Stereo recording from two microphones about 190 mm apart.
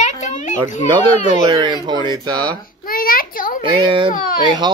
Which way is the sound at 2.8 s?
50° left (ahead or behind).